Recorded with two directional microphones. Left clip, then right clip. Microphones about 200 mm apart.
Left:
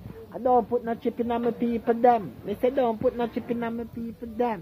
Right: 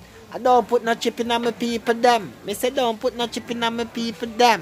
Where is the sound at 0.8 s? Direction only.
15° right (ahead or behind).